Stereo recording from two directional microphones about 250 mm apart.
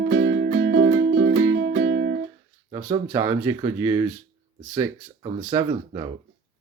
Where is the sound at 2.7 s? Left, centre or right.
Centre.